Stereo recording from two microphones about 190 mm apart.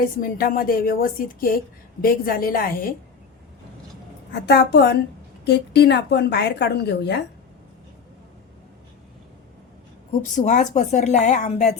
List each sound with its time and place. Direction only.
0.0 s a woman's voice: 50° left (ahead or behind)
4.4 s a woman's voice: 60° left (ahead or behind)
10.3 s a woman's voice: 40° left (ahead or behind)